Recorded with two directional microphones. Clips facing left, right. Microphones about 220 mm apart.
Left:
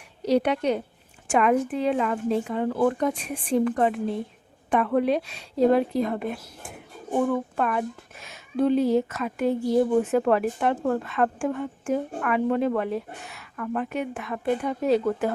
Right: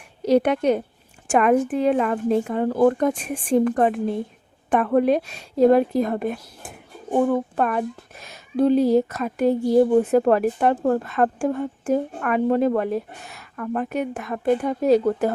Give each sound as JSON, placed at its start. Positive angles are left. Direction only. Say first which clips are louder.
{"t": 0.3, "sound": "a woman's voice", "louder": "right 4 dB", "side_deg": -50}